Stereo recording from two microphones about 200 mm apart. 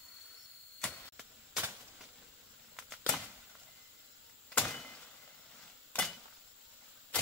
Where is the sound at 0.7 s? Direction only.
5° left (ahead or behind).